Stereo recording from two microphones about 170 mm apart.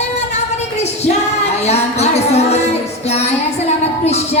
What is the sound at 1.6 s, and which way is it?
Music, 40° left (ahead or behind).